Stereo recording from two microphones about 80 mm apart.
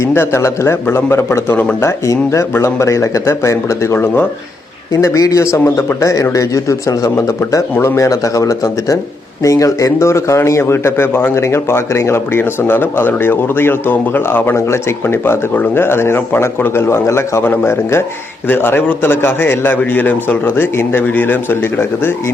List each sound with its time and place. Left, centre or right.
0.0 s a man's voice: left